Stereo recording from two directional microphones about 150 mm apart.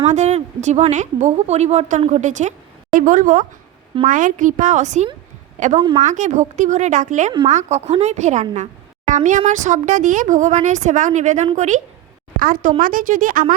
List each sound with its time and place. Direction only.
0.1 s a woman's voice: 50° right (ahead or behind)
12.4 s speech: 70° right (ahead or behind)